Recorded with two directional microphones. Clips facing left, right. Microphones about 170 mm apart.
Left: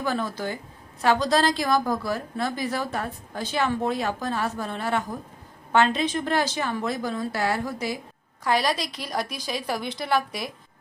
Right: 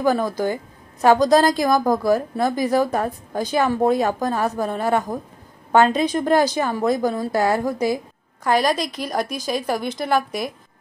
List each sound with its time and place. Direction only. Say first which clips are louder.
0.0 s a woman's voice: right 8 dB; 40° right (ahead or behind)
2.5 s a woman's voice: right 9 dB; 15° right (ahead or behind)
2.8 s a woman's voice: right 9 dB; 40° right (ahead or behind)